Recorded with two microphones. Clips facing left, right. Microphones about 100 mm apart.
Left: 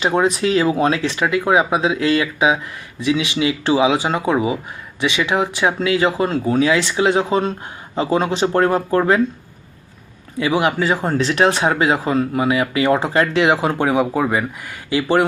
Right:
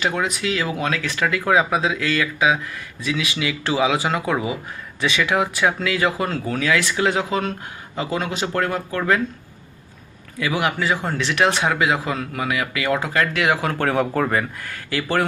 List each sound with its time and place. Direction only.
0.0 s speech: 30° left (ahead or behind)
10.4 s speech: 25° left (ahead or behind)